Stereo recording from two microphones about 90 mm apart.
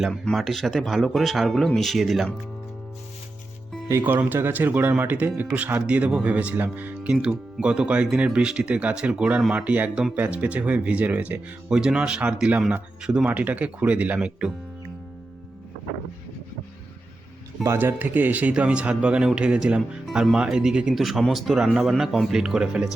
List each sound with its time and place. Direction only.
0.1 s speech: 5° left (ahead or behind)
4.0 s speech: 20° right (ahead or behind)
17.7 s speech: 20° right (ahead or behind)